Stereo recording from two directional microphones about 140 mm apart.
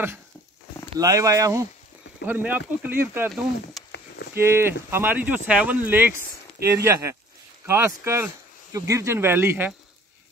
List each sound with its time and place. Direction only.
0.9 s speech: 25° right (ahead or behind)
4.3 s speech: 15° right (ahead or behind)